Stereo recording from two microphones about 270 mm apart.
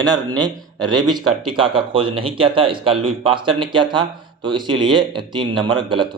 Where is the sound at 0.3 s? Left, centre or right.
Centre.